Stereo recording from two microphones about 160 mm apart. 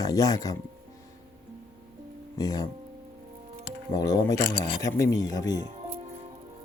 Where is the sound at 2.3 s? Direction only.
25° left (ahead or behind).